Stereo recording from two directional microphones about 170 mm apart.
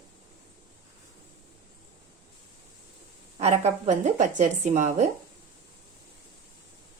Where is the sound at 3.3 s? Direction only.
40° right (ahead or behind).